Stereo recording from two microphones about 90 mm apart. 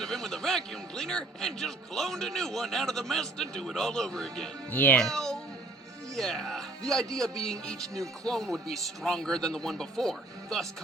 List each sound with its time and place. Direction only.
0.0 s a man's voice: 5° left (ahead or behind)
4.7 s speech: 20° left (ahead or behind)
4.9 s a child's voice: 5° left (ahead or behind)